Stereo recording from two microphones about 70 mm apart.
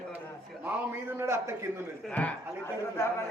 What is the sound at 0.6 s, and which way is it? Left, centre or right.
Speech, right.